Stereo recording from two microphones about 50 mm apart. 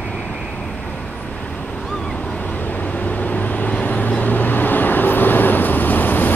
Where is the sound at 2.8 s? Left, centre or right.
Left.